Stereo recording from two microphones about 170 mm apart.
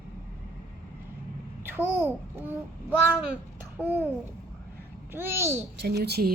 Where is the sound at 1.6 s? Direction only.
10° right (ahead or behind).